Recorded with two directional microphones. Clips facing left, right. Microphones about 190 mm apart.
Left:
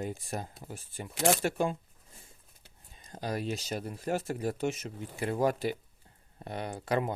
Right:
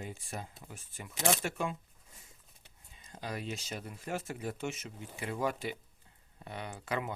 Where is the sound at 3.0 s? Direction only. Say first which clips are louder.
Left 6 dB; 40° left (ahead or behind).